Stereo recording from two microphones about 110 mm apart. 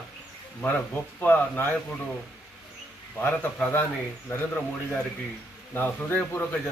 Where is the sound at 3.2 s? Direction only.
15° left (ahead or behind).